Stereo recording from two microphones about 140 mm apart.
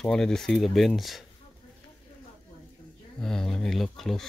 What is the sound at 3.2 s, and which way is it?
Speech, 5° left (ahead or behind).